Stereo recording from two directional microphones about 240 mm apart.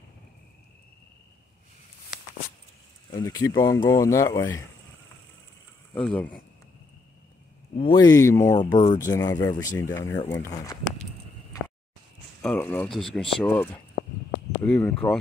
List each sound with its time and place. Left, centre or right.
3.1 s speech: centre
5.9 s speech: centre
7.7 s speech: left
12.4 s speech: centre